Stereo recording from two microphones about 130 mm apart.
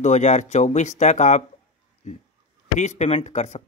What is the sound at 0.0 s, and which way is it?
Speech, 65° left (ahead or behind).